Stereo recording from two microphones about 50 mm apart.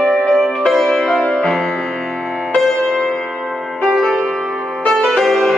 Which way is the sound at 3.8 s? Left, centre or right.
Centre.